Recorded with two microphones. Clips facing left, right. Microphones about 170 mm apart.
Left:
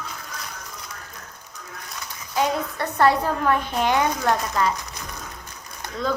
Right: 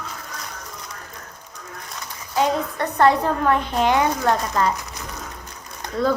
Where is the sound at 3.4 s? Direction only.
20° right (ahead or behind).